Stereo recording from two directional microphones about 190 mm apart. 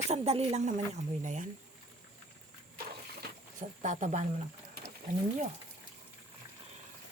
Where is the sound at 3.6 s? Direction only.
40° right (ahead or behind).